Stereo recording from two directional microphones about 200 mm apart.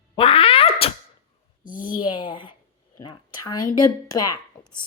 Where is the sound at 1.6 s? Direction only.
40° left (ahead or behind).